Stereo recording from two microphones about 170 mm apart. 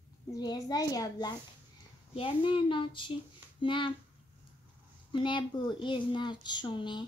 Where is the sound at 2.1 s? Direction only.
30° left (ahead or behind).